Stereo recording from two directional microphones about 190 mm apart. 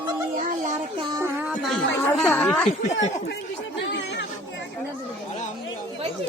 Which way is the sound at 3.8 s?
70° left (ahead or behind).